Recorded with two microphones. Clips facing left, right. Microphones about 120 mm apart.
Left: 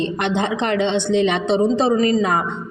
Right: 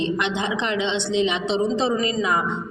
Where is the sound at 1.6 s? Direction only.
45° left (ahead or behind).